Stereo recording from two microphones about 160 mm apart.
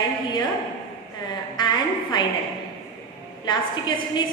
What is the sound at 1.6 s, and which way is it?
Speech, 30° left (ahead or behind).